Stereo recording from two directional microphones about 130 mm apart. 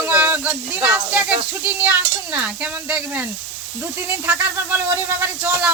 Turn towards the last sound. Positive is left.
turn(degrees=-15)  # may be behind; listen again after turning